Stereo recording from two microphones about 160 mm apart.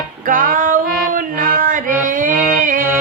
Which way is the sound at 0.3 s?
60° right (ahead or behind).